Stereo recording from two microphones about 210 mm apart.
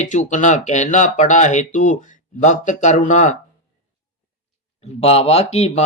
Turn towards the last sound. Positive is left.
turn(degrees=30)  # may be behind; listen again after turning